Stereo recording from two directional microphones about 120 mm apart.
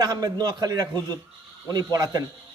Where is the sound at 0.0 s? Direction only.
35° right (ahead or behind).